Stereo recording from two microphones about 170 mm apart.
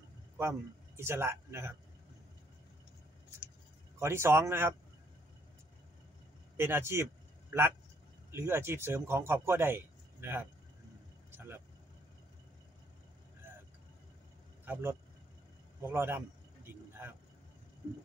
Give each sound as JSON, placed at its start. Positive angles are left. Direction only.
{"t": 0.4, "sound": "speech", "side_deg": -15}
{"t": 4.0, "sound": "speech", "side_deg": -15}
{"t": 6.5, "sound": "speech", "side_deg": -15}
{"t": 8.3, "sound": "speech", "side_deg": -15}
{"t": 11.3, "sound": "vehicle", "side_deg": -15}
{"t": 14.6, "sound": "speech", "side_deg": -15}
{"t": 15.8, "sound": "vehicle", "side_deg": -15}